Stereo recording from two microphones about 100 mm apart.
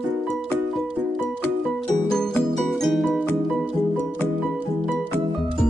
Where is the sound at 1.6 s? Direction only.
5° left (ahead or behind).